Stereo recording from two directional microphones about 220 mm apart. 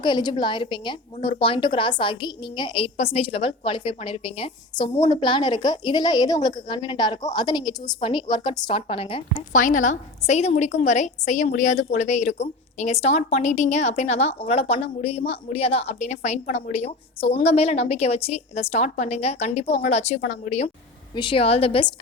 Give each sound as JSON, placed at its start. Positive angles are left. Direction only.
{"t": 0.0, "sound": "a woman's voice", "side_deg": 20}
{"t": 9.5, "sound": "a woman's voice", "side_deg": 35}